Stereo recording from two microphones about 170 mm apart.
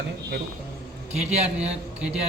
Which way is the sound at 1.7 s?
5° right (ahead or behind).